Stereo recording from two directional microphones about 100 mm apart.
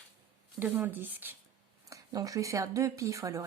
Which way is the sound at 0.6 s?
20° right (ahead or behind).